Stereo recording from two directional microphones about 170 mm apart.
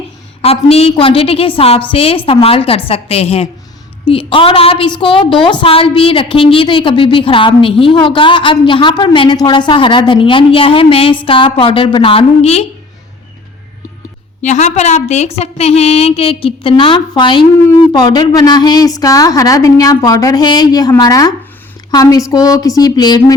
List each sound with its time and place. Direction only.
0.4 s a woman's voice: 35° left (ahead or behind)
14.4 s a woman's voice: 45° left (ahead or behind); by 23.3 s 25° left (ahead or behind)